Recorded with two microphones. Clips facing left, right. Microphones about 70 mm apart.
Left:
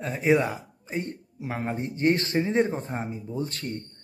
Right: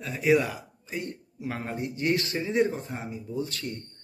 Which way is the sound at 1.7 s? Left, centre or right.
Left.